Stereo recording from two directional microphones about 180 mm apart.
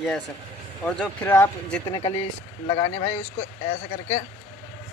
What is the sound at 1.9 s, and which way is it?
Speech, 30° left (ahead or behind).